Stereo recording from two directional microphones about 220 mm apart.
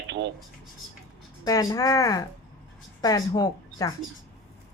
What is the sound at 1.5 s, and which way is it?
Speech, 15° left (ahead or behind).